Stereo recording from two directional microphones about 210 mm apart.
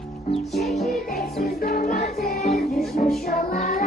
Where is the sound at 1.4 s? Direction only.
45° left (ahead or behind).